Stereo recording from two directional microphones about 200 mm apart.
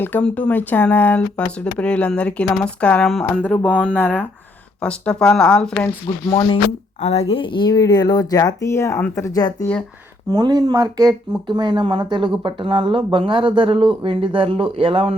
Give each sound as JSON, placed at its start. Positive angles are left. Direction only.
{"t": 0.0, "sound": "speech", "side_deg": 5}
{"t": 3.7, "sound": "speech", "side_deg": -5}
{"t": 3.9, "sound": "speech", "side_deg": 10}
{"t": 6.1, "sound": "speech", "side_deg": 25}
{"t": 10.2, "sound": "speech", "side_deg": -20}